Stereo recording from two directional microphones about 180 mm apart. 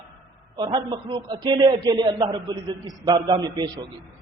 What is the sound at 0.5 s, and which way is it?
A man's voice, 25° right (ahead or behind).